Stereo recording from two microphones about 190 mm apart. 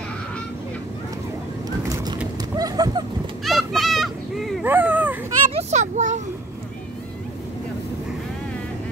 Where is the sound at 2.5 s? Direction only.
20° right (ahead or behind).